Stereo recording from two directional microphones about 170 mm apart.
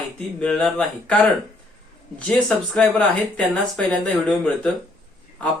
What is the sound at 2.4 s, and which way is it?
Speech, 5° left (ahead or behind).